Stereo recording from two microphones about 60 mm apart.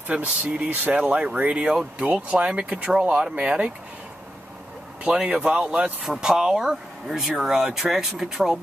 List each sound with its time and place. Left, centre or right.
0.1 s speech: right
5.0 s speech: centre